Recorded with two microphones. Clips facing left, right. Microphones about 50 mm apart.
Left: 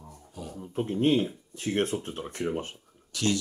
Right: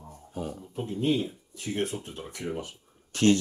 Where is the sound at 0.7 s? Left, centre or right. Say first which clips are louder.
Left 4 dB; left.